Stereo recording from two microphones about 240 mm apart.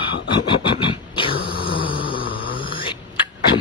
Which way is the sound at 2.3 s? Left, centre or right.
Left.